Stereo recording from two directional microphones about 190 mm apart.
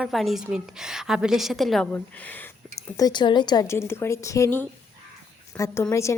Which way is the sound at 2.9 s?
20° left (ahead or behind).